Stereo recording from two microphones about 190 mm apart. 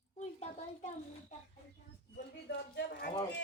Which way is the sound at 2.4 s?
65° left (ahead or behind).